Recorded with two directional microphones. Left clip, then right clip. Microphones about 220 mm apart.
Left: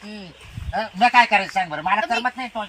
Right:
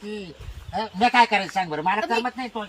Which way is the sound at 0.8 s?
10° right (ahead or behind).